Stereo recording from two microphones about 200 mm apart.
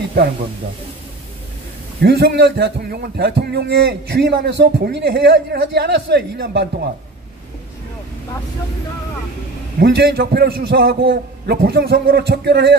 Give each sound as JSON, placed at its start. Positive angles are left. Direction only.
{"t": 2.0, "sound": "a man's voice", "side_deg": -55}
{"t": 9.8, "sound": "a man's voice", "side_deg": -55}